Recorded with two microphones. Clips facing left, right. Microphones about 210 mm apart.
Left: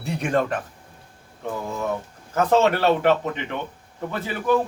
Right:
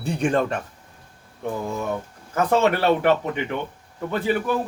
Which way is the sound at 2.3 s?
15° right (ahead or behind).